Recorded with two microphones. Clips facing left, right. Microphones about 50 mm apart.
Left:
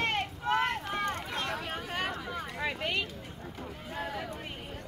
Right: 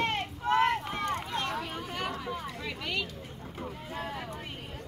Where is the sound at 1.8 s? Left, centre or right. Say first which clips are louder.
Even; left.